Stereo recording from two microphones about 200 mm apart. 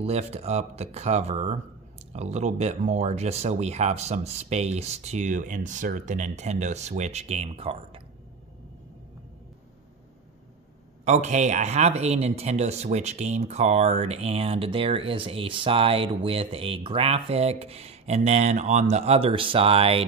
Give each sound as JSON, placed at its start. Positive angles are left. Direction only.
{"t": 0.0, "sound": "speech", "side_deg": -30}
{"t": 11.1, "sound": "speech", "side_deg": -35}